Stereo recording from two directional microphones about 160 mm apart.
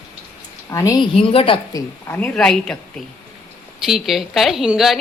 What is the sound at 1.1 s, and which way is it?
Speech, 35° left (ahead or behind).